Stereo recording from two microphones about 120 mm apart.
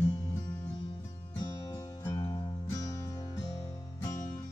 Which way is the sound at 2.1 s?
35° left (ahead or behind).